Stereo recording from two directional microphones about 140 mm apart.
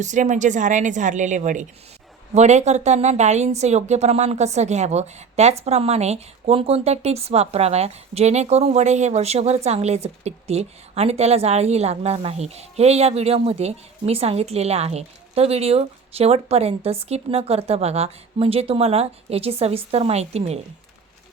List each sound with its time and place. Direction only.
0.0 s a woman's voice: 60° right (ahead or behind)